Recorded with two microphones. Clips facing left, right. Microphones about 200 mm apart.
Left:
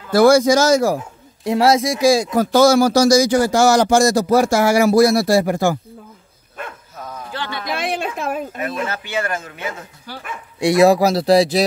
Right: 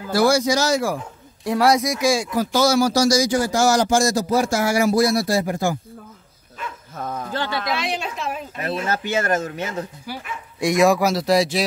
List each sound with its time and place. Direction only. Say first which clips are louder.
0.1 s speech: left 6 dB; 50° left (ahead or behind)
1.4 s speech: left 3 dB; 25° left (ahead or behind)
2.3 s speech: left 5 dB; 50° left (ahead or behind); by 5.8 s 70° left (ahead or behind)
6.6 s dog: left 2 dB; 55° left (ahead or behind)
7.0 s a sound: right 3 dB; 50° right (ahead or behind)
7.7 s a sound: left 3 dB; 55° left (ahead or behind)
8.6 s speech: right 1 dB; 40° right (ahead or behind)
10.6 s speech: left 4 dB; 35° left (ahead or behind)